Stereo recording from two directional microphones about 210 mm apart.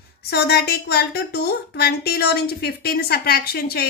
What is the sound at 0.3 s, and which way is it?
A woman's voice, 50° left (ahead or behind).